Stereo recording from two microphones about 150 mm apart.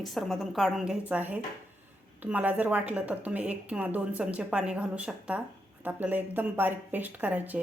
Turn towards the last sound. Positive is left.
turn(degrees=-10)  # may be behind; listen again after turning